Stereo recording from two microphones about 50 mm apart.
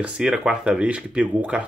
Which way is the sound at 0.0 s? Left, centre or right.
Centre.